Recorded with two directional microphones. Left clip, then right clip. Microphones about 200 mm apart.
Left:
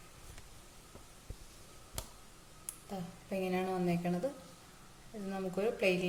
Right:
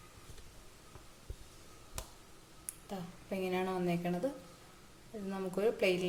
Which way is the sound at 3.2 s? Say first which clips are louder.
Even; 10° right (ahead or behind).